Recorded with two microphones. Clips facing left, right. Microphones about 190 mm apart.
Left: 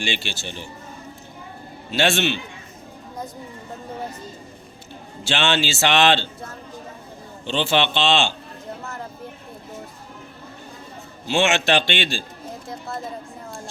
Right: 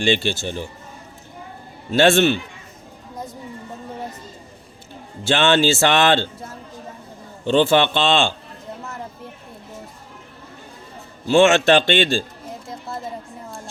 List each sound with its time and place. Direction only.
0.1 s speech: 50° right (ahead or behind)
1.9 s speech: 50° right (ahead or behind)
5.2 s speech: 50° right (ahead or behind)
7.4 s speech: 50° right (ahead or behind)
11.3 s speech: 50° right (ahead or behind)